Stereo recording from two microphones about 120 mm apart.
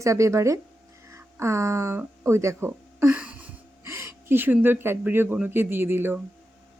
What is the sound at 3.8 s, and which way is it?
Speech, 20° right (ahead or behind).